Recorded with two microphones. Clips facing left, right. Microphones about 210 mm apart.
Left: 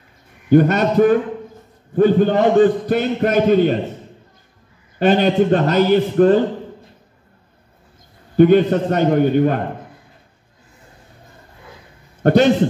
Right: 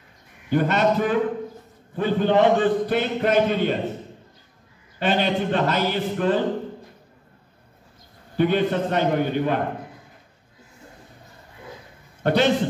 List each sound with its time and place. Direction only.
0.5 s a man's voice: 45° left (ahead or behind)
4.9 s a man's voice: 45° left (ahead or behind)
8.4 s a man's voice: 45° left (ahead or behind)
12.2 s a man's voice: 45° left (ahead or behind)